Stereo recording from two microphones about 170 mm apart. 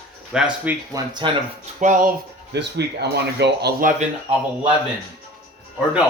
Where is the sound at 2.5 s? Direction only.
90° right.